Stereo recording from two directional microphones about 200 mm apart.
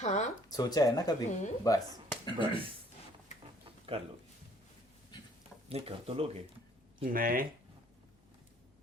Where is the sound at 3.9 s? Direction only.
30° right (ahead or behind).